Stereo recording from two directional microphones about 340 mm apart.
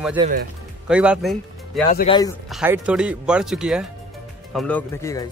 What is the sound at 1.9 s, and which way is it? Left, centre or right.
Speech, left.